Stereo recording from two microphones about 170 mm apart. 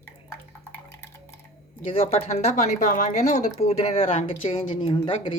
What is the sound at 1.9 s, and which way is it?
A woman's voice, 35° left (ahead or behind).